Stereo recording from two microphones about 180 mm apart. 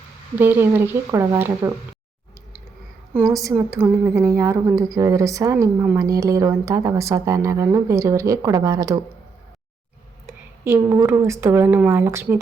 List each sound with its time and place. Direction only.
0.3 s a woman's voice: 10° right (ahead or behind)
3.1 s a woman's voice: 15° right (ahead or behind)
10.6 s a woman's voice: 10° right (ahead or behind)